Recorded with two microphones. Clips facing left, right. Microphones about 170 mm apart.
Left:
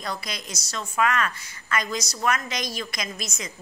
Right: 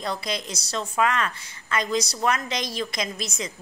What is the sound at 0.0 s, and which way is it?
A woman's voice, 25° right (ahead or behind).